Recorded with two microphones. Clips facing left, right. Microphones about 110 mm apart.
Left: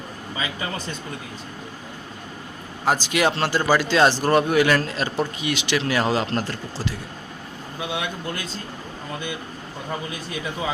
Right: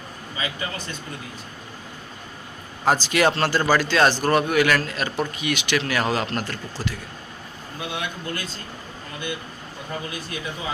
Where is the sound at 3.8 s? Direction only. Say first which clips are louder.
Left 1 dB; 20° left (ahead or behind).